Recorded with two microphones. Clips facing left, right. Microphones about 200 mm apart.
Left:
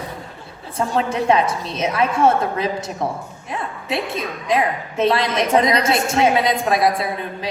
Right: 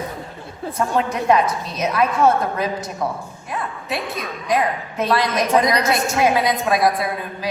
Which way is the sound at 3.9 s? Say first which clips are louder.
Left 3 dB; 25° left (ahead or behind).